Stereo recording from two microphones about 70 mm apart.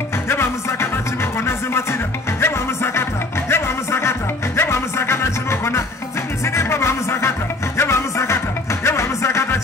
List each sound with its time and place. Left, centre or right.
0.3 s music: left